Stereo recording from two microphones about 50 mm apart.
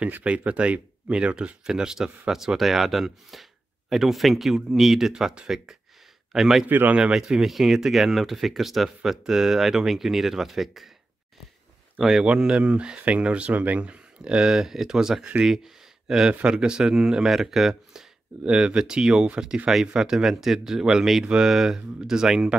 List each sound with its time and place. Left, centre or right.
0.5 s speech: right
1.6 s speech: centre
12.0 s speech: centre
12.3 s speech: right
18.4 s speech: centre